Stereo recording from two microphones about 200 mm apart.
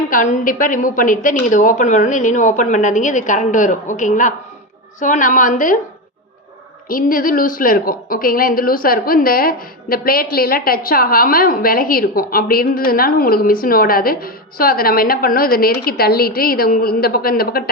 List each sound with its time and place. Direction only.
0.1 s a woman's voice: 40° left (ahead or behind)
6.8 s a woman's voice: 45° left (ahead or behind)